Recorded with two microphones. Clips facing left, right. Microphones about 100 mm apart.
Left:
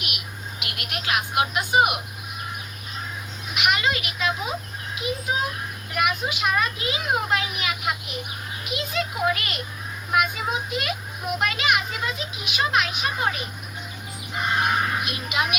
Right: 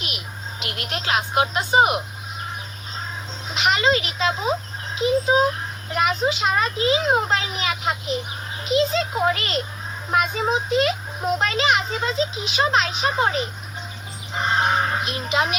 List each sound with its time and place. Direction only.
0.6 s a child's voice: 30° right (ahead or behind)
3.5 s a child's voice: 30° right (ahead or behind)